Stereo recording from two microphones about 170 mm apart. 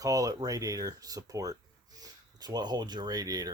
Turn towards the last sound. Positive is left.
turn(degrees=-20)  # may be behind; listen again after turning